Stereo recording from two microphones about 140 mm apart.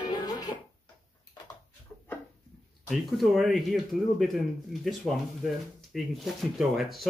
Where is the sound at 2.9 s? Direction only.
Centre (ahead or behind).